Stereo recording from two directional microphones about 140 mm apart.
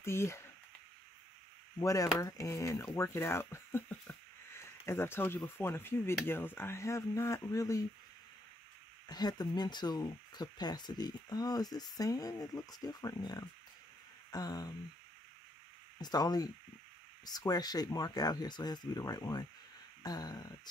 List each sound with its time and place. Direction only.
0.0 s speech: 20° left (ahead or behind)
1.8 s speech: 25° left (ahead or behind)
9.1 s speech: 30° left (ahead or behind)
16.0 s speech: 30° left (ahead or behind)